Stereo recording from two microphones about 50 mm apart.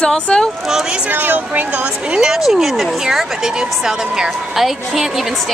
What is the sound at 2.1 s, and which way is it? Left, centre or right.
Speech, centre.